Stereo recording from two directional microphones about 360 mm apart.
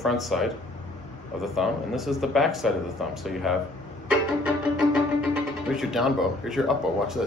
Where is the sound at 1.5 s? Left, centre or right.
Centre.